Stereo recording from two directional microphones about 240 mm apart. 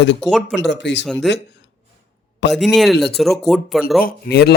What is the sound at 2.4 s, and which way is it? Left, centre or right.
Speech, left.